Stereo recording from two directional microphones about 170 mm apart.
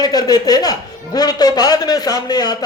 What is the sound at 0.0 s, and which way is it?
A man's voice, 25° left (ahead or behind).